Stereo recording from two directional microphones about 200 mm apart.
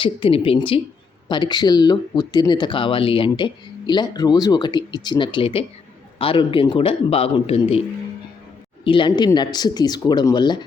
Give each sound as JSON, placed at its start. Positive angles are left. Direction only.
{"t": 0.0, "sound": "speech", "side_deg": 25}